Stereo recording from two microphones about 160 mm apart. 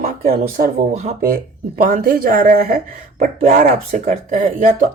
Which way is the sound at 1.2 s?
65° right (ahead or behind).